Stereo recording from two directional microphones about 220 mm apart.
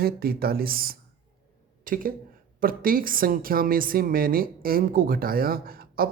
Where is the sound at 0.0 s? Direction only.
45° right (ahead or behind).